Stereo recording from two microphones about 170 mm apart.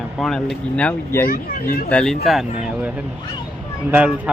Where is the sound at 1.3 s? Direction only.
55° left (ahead or behind).